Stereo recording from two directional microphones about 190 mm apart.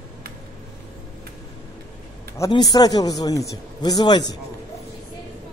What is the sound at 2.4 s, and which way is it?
A man's voice, 20° left (ahead or behind).